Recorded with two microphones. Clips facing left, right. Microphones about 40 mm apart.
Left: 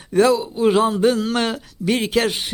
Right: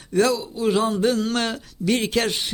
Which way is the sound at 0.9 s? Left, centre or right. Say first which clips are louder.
Left 3 dB; centre.